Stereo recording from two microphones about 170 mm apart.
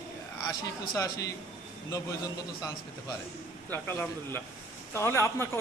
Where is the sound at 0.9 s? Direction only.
20° left (ahead or behind).